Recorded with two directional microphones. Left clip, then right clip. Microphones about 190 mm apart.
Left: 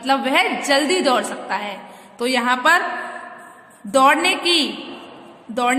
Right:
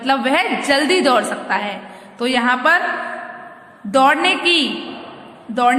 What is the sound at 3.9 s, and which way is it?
Speech, 15° left (ahead or behind).